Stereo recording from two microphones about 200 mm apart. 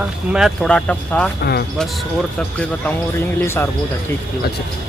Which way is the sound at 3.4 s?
10° left (ahead or behind).